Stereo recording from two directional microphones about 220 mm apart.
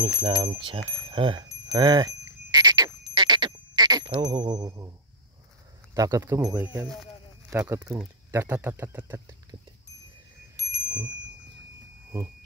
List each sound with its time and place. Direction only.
0.0 s speech: 20° right (ahead or behind)
3.2 s a sound: 20° right (ahead or behind)
5.9 s speech: 15° right (ahead or behind)